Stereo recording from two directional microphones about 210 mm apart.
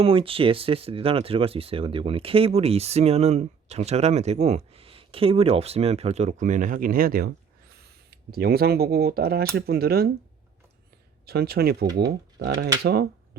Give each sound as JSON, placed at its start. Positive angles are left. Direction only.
{"t": 0.0, "sound": "speech", "side_deg": -25}
{"t": 11.3, "sound": "speech", "side_deg": -50}